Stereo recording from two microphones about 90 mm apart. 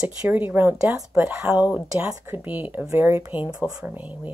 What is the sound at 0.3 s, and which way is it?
Speech, 20° right (ahead or behind).